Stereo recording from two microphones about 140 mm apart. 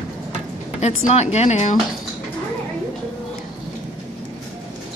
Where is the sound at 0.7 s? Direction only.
55° left (ahead or behind).